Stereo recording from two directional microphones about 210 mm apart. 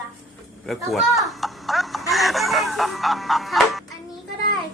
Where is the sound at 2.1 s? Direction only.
Centre (ahead or behind).